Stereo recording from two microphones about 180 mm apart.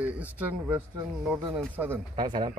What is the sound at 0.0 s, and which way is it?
Speech, 10° right (ahead or behind).